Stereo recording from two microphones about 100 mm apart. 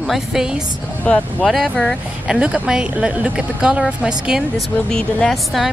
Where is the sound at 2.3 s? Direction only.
10° right (ahead or behind).